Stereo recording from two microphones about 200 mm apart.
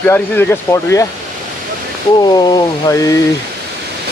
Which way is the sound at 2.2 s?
20° left (ahead or behind).